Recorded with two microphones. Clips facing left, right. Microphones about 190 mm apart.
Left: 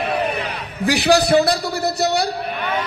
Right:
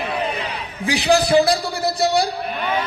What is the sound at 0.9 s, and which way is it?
A man's voice, 65° left (ahead or behind).